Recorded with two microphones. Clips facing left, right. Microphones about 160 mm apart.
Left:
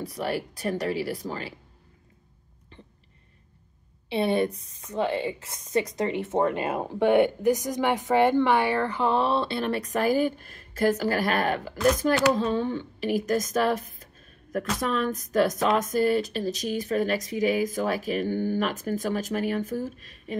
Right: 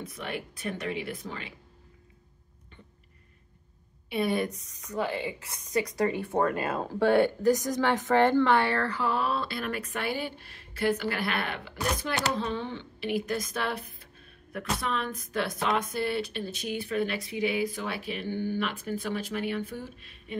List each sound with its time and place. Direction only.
0.0 s speech: 35° left (ahead or behind)
4.1 s a woman's voice: 30° left (ahead or behind)